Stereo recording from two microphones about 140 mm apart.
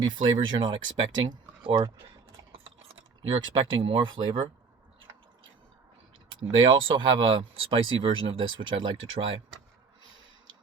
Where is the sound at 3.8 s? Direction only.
35° right (ahead or behind).